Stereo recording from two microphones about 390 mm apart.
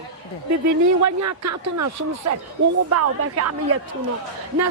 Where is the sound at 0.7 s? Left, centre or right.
Right.